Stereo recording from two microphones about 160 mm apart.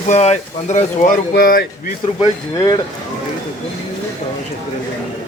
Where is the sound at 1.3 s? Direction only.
70° left (ahead or behind).